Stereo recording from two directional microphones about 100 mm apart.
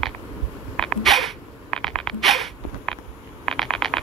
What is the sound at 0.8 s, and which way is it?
Sneeze, 5° left (ahead or behind).